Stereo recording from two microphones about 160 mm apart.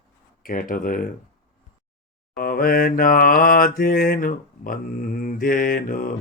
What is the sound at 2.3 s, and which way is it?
Mantra, 65° left (ahead or behind).